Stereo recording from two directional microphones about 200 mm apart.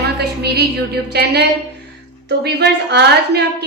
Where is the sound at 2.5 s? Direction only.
55° right (ahead or behind).